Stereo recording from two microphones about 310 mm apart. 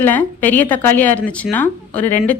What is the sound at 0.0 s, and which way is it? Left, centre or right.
Speech, centre.